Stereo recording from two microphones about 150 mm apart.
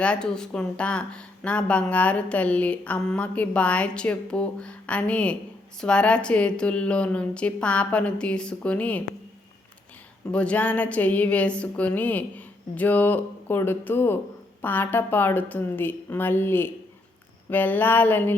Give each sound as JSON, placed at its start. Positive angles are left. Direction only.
{"t": 0.0, "sound": "speech", "side_deg": 5}
{"t": 10.3, "sound": "speech", "side_deg": 10}